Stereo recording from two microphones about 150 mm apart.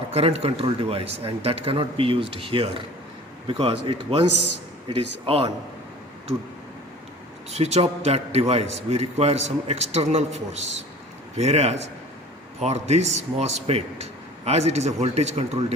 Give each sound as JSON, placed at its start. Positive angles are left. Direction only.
{"t": 0.1, "sound": "speech", "side_deg": -40}
{"t": 7.5, "sound": "a man's voice", "side_deg": -45}